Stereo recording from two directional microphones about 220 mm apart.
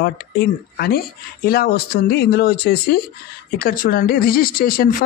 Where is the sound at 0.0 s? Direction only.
45° left (ahead or behind).